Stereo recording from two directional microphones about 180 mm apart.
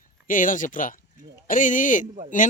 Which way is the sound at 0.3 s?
45° left (ahead or behind).